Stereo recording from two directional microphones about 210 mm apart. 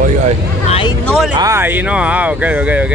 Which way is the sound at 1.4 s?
10° right (ahead or behind).